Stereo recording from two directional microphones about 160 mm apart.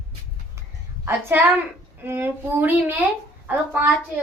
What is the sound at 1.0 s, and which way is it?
Speech, 15° right (ahead or behind).